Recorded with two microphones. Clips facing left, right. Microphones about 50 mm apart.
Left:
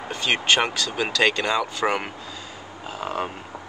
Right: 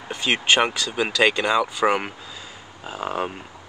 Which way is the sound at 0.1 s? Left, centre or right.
Centre.